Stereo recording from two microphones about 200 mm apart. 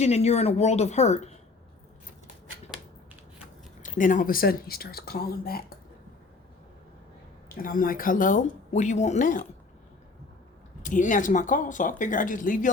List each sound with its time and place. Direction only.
0.0 s speech: 35° left (ahead or behind)
2.6 s a sound: 5° right (ahead or behind)
3.8 s speech: 40° left (ahead or behind)
7.6 s speech: 45° left (ahead or behind)
10.8 s speech: 40° left (ahead or behind)